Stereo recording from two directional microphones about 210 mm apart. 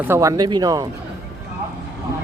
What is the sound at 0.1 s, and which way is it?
Speech, 15° right (ahead or behind).